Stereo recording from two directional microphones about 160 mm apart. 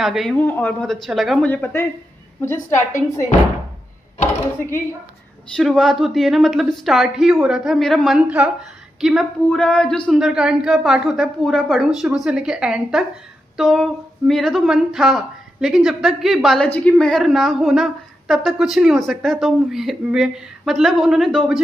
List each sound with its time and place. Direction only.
0.0 s a woman's voice: centre (ahead or behind)
0.4 s a woman's voice: 10° left (ahead or behind)
5.6 s a woman's voice: centre (ahead or behind)